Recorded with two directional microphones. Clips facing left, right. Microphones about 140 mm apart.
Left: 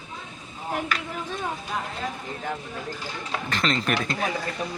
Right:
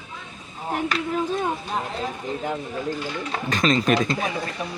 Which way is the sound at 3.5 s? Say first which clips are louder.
Right 6 dB; 15° right (ahead or behind).